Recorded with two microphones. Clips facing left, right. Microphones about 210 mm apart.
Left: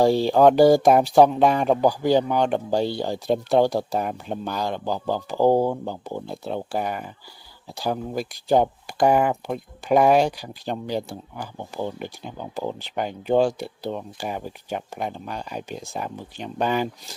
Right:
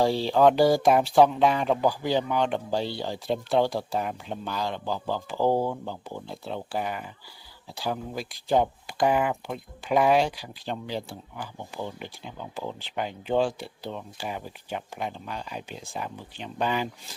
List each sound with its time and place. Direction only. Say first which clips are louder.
0.0 s speech: left 4 dB; 45° left (ahead or behind)